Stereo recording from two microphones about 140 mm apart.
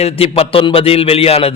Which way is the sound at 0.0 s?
45° left (ahead or behind).